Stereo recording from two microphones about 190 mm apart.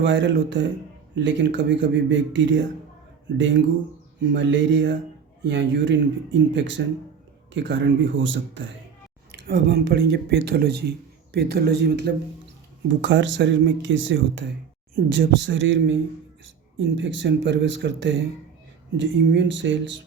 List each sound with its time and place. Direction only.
0.0 s speech: 70° right (ahead or behind)
9.5 s speech: 65° right (ahead or behind)
13.0 s speech: 75° right (ahead or behind)
14.9 s speech: 60° right (ahead or behind)